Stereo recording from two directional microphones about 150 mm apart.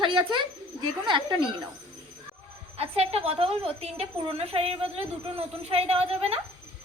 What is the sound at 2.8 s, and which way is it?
A woman's voice, 45° right (ahead or behind).